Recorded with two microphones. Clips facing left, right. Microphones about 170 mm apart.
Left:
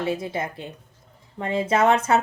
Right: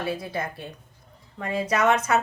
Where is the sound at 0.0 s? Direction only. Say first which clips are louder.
Left 3 dB; 20° left (ahead or behind).